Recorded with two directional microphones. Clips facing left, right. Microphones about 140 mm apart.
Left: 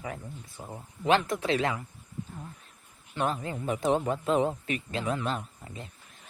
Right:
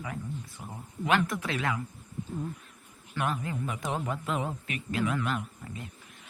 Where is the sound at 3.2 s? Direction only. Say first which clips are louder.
Left 1 dB; 30° left (ahead or behind).